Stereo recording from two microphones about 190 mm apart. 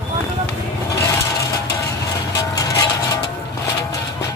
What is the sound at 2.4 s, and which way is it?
Music, 15° left (ahead or behind).